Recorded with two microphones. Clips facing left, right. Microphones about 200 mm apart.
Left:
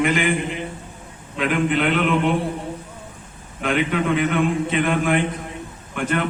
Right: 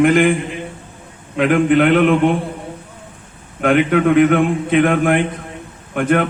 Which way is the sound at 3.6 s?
55° right (ahead or behind).